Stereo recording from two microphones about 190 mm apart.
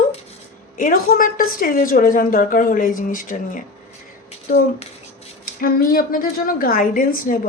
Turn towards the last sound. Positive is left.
turn(degrees=45)  # may be behind; listen again after turning